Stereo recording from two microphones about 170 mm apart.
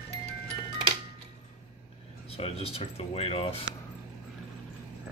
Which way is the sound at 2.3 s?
35° left (ahead or behind).